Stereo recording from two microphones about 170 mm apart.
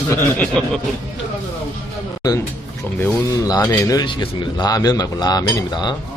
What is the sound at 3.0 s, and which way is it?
Speech, 15° left (ahead or behind).